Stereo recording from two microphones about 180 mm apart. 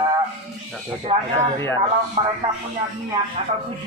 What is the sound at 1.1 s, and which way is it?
Speech, 35° right (ahead or behind).